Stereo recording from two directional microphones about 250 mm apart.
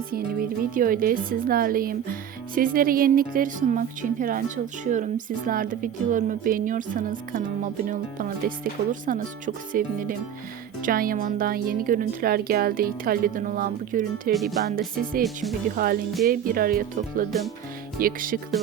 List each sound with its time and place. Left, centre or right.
0.3 s speech: right